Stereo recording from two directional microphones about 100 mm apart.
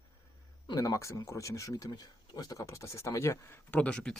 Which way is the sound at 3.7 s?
10° left (ahead or behind).